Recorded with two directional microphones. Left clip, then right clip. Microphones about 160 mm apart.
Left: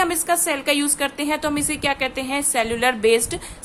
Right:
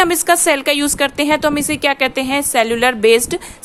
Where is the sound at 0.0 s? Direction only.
50° right (ahead or behind).